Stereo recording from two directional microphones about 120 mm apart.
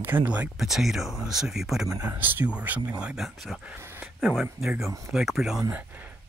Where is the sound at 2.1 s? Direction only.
15° right (ahead or behind); by 3.8 s centre (ahead or behind).